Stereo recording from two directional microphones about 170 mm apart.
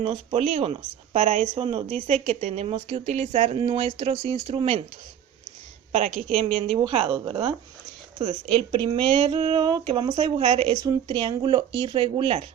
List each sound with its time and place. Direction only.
0.0 s speech: 30° right (ahead or behind)
1.5 s speech: 30° right (ahead or behind)
6.2 s speech: 30° right (ahead or behind)